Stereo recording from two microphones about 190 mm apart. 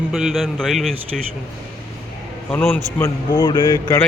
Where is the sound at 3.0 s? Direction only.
25° left (ahead or behind).